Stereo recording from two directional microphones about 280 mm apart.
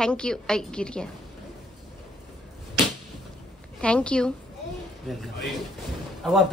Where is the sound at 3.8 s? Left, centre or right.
Centre.